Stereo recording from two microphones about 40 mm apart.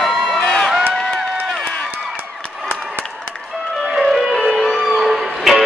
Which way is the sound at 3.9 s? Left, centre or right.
Centre.